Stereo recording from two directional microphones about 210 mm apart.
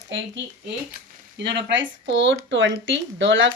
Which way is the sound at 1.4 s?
55° right (ahead or behind).